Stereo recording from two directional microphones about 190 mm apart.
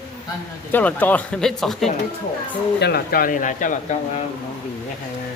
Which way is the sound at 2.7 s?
60° left (ahead or behind).